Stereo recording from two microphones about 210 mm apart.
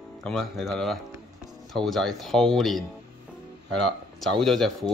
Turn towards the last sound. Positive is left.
turn(degrees=0)  # may be behind; listen again after turning